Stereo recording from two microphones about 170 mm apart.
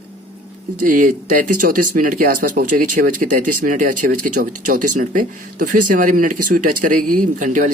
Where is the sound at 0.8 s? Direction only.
50° right (ahead or behind).